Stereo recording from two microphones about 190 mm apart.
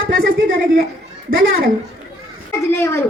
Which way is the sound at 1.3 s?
45° right (ahead or behind).